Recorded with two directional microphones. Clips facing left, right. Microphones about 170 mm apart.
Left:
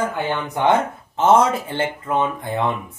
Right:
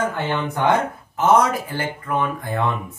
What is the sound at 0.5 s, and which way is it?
Speech, 25° left (ahead or behind).